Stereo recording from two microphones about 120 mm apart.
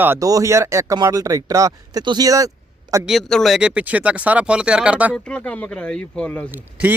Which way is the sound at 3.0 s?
Centre (ahead or behind).